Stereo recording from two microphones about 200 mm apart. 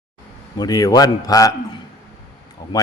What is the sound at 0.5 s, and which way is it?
Speech, 20° left (ahead or behind).